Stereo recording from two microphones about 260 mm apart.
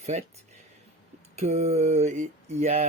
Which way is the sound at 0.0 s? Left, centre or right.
Right.